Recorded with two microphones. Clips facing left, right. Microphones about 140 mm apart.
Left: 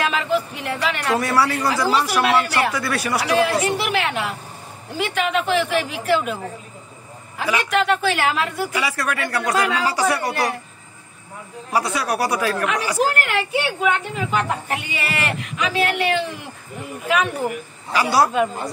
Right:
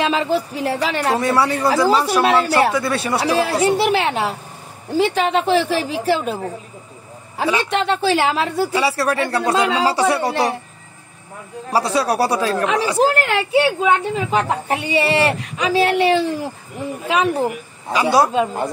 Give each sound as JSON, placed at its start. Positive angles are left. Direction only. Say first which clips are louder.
{"t": 0.0, "sound": "speech", "louder": "right 3 dB", "side_deg": -30}
{"t": 7.3, "sound": "a woman's voice", "louder": "right 2 dB", "side_deg": -30}
{"t": 11.7, "sound": "speech", "louder": "right 4 dB", "side_deg": -30}
{"t": 17.9, "sound": "a woman's voice", "louder": "right 2 dB", "side_deg": -20}